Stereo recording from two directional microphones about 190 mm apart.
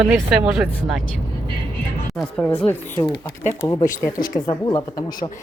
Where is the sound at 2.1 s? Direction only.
5° left (ahead or behind).